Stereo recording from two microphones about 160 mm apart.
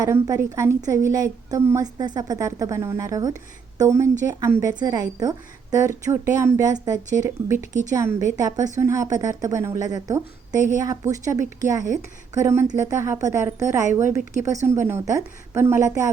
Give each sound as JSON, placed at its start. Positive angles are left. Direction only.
{"t": 0.0, "sound": "a woman's voice", "side_deg": -20}